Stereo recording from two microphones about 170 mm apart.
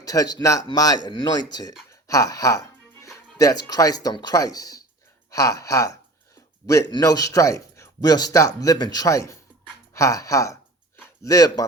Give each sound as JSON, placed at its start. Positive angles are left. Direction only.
{"t": 0.0, "sound": "speech", "side_deg": 20}
{"t": 1.9, "sound": "music", "side_deg": 20}
{"t": 3.3, "sound": "speech", "side_deg": 20}
{"t": 9.9, "sound": "a sound", "side_deg": 20}